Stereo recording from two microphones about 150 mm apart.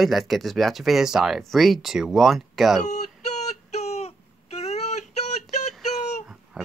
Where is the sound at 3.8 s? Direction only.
45° left (ahead or behind).